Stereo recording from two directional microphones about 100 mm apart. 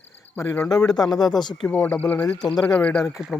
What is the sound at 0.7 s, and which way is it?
Speech, 40° left (ahead or behind).